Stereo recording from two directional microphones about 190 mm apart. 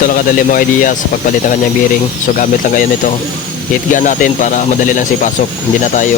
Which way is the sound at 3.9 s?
45° left (ahead or behind).